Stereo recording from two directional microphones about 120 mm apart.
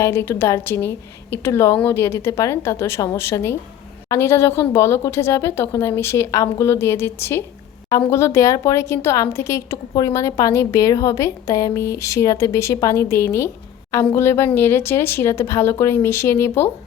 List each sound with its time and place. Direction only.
0.0 s speech: 20° left (ahead or behind)